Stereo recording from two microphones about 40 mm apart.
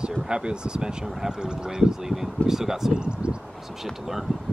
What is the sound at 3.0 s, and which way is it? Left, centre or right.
Speech, right.